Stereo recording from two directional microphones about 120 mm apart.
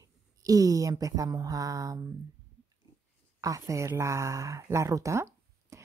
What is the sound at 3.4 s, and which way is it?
Speech, 25° right (ahead or behind).